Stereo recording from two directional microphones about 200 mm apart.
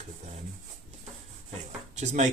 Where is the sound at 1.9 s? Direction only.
35° right (ahead or behind).